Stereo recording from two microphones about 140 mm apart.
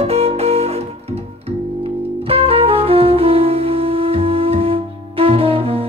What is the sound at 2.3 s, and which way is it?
Music, 45° right (ahead or behind).